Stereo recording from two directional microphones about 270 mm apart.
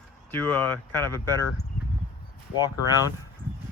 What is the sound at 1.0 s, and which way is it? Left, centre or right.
Speech, centre.